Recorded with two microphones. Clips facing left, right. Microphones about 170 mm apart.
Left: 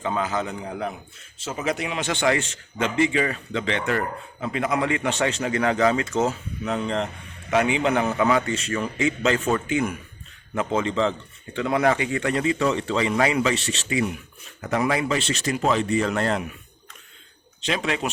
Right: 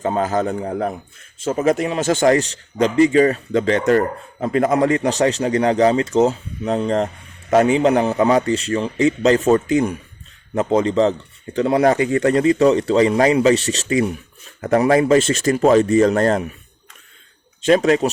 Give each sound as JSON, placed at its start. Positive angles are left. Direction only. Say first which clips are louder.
{"t": 0.0, "sound": "a man's voice", "louder": "right 7 dB", "side_deg": -45}
{"t": 17.6, "sound": "speech", "louder": "right 11 dB", "side_deg": -45}